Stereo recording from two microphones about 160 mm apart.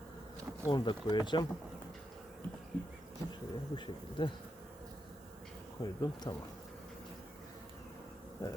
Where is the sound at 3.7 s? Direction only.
30° left (ahead or behind).